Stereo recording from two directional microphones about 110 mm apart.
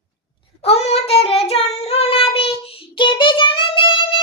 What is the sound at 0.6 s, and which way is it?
Child singing, 70° left (ahead or behind).